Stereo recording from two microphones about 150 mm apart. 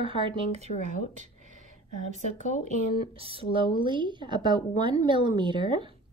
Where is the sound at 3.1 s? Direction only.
40° right (ahead or behind).